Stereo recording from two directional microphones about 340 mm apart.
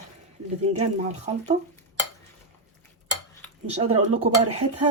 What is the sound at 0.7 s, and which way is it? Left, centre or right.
Speech, centre.